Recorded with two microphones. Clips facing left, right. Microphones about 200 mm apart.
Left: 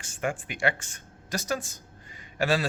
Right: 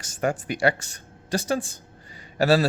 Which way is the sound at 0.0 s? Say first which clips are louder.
Right 5 dB; 40° right (ahead or behind).